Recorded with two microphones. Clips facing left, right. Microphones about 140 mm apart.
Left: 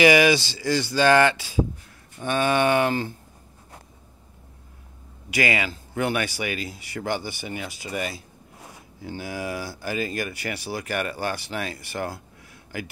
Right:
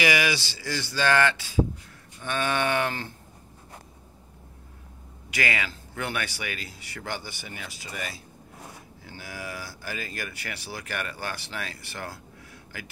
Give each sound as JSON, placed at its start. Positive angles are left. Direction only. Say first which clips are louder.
{"t": 0.0, "sound": "speech", "louder": "left 8 dB", "side_deg": 25}
{"t": 5.3, "sound": "speech", "louder": "left 5 dB", "side_deg": 10}